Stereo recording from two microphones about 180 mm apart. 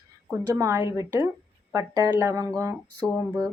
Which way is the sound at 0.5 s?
15° right (ahead or behind).